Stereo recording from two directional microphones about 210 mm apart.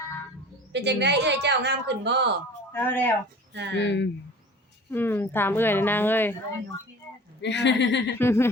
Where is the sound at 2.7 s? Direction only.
10° left (ahead or behind).